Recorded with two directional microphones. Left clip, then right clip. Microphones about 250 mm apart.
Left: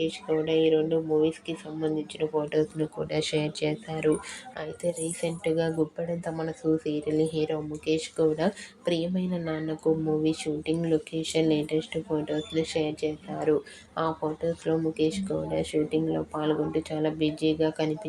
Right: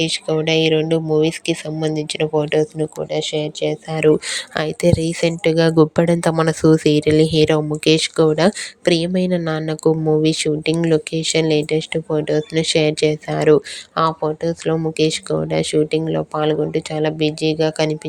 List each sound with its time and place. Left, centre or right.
0.0 s speech: right; by 3.8 s centre
3.9 s speech: right